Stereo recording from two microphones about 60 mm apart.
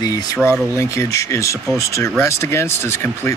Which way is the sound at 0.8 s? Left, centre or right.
Left.